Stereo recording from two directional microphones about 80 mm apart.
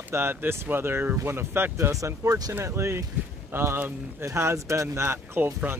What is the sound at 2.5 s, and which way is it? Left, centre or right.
Speech, right.